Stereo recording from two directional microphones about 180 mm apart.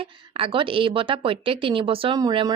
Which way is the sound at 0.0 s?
30° right (ahead or behind).